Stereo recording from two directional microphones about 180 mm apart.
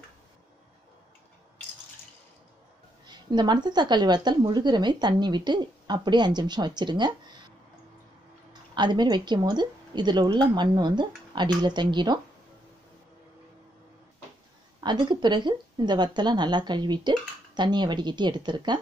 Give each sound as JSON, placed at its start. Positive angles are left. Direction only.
{"t": 3.1, "sound": "speech", "side_deg": -25}
{"t": 8.7, "sound": "speech", "side_deg": -25}
{"t": 14.8, "sound": "speech", "side_deg": -25}